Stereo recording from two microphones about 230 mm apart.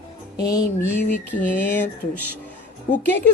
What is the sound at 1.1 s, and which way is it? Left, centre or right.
Speech, centre.